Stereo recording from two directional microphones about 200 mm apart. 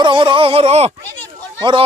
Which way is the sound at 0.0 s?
25° right (ahead or behind).